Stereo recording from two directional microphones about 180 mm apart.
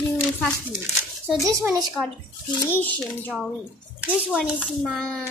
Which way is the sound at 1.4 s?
15° right (ahead or behind).